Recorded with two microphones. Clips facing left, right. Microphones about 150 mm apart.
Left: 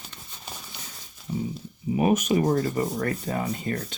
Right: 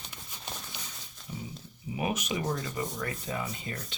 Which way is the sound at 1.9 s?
45° left (ahead or behind).